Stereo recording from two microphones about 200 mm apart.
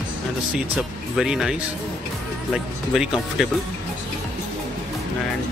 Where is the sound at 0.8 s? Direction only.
Centre (ahead or behind).